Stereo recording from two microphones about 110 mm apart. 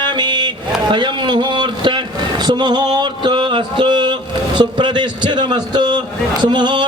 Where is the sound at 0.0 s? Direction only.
45° right (ahead or behind).